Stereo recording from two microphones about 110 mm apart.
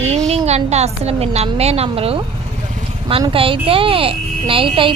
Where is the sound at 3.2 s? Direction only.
55° right (ahead or behind).